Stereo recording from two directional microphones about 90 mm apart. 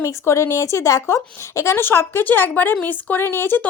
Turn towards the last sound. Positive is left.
turn(degrees=25)  # may be behind; listen again after turning